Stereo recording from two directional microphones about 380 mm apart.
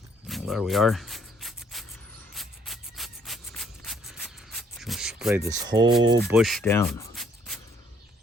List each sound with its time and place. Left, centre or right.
0.3 s a sound: centre
2.3 s rub: centre
6.0 s speech: right
6.2 s speech: centre